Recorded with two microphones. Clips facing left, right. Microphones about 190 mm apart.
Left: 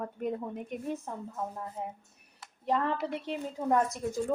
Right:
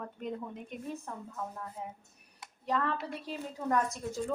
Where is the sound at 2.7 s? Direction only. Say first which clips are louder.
Left 3 dB; 25° left (ahead or behind).